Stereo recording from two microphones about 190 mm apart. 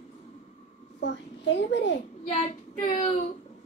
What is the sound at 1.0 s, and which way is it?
Speech, 70° left (ahead or behind).